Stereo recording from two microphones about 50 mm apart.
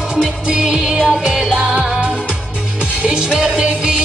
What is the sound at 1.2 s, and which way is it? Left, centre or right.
Music, centre.